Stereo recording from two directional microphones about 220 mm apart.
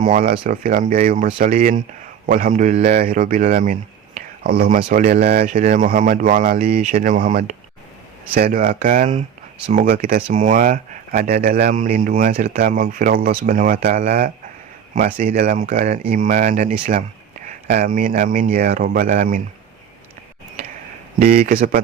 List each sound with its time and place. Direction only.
0.0 s a man's voice: 35° right (ahead or behind)
8.5 s speech: 40° right (ahead or behind)
21.2 s speech: 40° right (ahead or behind)